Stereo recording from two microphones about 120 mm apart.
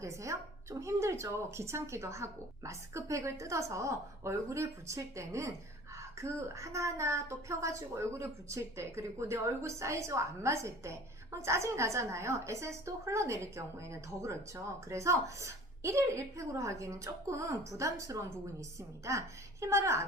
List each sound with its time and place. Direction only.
0.0 s a woman's voice: 25° right (ahead or behind)